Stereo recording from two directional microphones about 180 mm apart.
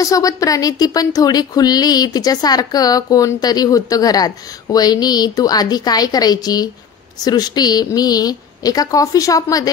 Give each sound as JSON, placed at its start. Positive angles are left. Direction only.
{"t": 0.0, "sound": "a woman's voice", "side_deg": 20}